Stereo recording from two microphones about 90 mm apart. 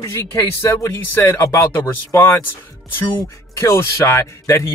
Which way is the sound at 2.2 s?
25° left (ahead or behind).